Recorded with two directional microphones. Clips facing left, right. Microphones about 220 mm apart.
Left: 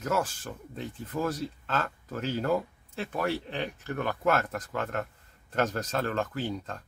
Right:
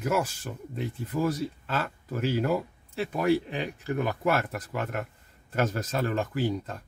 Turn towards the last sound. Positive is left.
turn(degrees=-10)  # may be behind; listen again after turning